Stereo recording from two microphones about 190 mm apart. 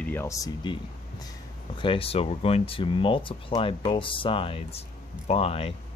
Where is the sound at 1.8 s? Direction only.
30° left (ahead or behind).